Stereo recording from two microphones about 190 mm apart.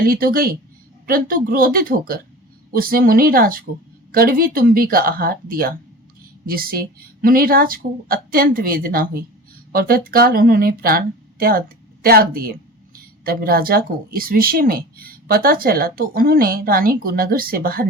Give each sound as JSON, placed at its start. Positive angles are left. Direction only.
{"t": 0.0, "sound": "speech", "side_deg": -50}